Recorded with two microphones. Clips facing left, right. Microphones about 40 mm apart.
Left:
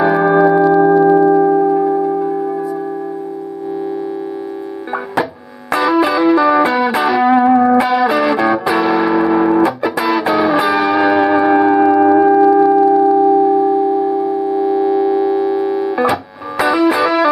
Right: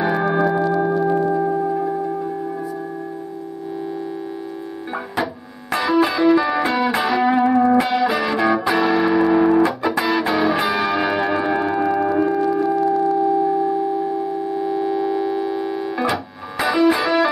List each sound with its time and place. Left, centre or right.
0.0 s church bell: centre
0.7 s music: centre
1.0 s singing bowl: left
5.7 s music: centre
12.0 s singing bowl: centre